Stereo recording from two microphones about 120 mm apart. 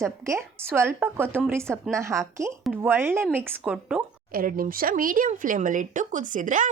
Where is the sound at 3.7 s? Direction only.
5° right (ahead or behind).